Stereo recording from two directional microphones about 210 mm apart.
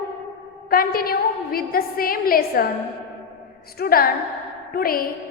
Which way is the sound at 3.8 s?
45° left (ahead or behind).